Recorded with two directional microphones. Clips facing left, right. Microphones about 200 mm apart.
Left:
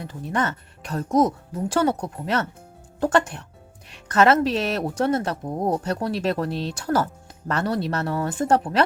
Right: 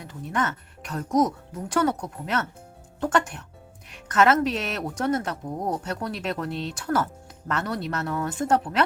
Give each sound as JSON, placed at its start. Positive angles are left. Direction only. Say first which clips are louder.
{"t": 0.0, "sound": "speech", "louder": "left 2 dB", "side_deg": 30}